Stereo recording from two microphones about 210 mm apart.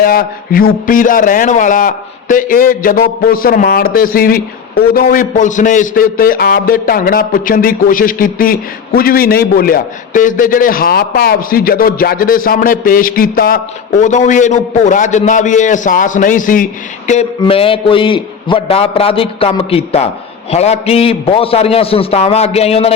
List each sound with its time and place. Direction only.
0.0 s a man's voice: 45° left (ahead or behind)
17.4 s a man's voice: 25° left (ahead or behind)